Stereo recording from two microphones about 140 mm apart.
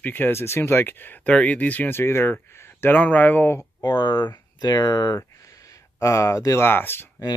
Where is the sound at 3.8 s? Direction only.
30° left (ahead or behind); by 7.1 s 15° left (ahead or behind).